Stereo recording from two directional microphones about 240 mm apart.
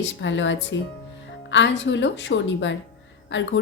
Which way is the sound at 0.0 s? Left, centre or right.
Left.